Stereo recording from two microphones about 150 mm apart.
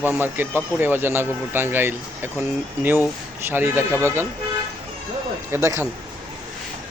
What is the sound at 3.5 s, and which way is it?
Speech, 15° right (ahead or behind).